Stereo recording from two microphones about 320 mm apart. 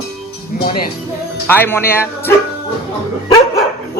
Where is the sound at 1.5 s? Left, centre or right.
Centre.